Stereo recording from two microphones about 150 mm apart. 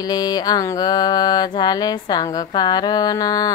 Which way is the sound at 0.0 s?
25° left (ahead or behind).